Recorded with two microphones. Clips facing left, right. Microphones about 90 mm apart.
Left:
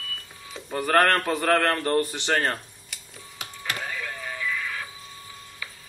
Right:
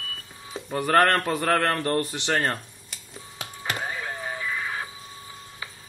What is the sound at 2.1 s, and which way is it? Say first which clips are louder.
Speech: even; 15° right (ahead or behind).